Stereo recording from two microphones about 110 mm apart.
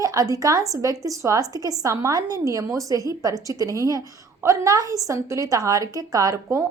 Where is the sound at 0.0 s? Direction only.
30° right (ahead or behind).